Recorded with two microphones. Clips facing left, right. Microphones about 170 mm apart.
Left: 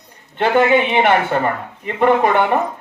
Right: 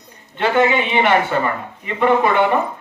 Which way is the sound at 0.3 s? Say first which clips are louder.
Left 2 dB; 50° left (ahead or behind).